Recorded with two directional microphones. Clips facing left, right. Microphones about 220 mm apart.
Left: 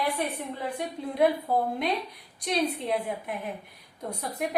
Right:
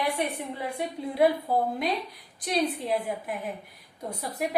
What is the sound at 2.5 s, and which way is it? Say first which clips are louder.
A woman's voice: even; centre (ahead or behind).